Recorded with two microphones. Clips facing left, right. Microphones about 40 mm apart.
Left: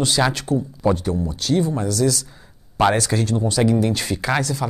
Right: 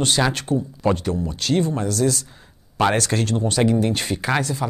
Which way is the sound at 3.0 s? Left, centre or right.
Right.